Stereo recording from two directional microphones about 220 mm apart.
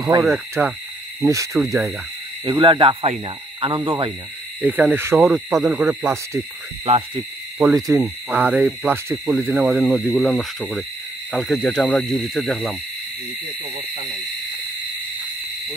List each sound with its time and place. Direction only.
0.0 s owl: 15° right (ahead or behind)
2.4 s speech: 20° right (ahead or behind)
4.6 s owl: 5° right (ahead or behind)
7.6 s owl: 15° right (ahead or behind)